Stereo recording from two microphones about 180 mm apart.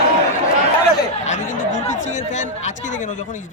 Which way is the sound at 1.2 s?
45° left (ahead or behind).